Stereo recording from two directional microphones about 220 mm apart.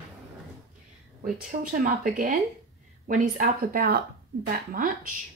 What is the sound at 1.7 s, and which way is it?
Speech, 40° right (ahead or behind).